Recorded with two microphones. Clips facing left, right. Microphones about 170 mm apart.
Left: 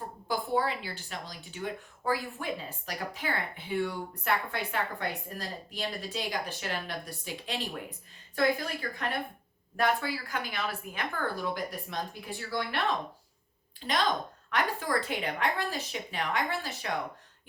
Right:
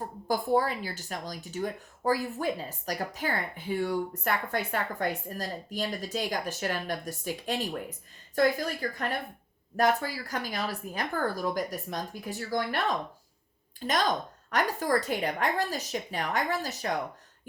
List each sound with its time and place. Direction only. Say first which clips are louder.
0.3 s a woman's voice: right 3 dB; 45° right (ahead or behind)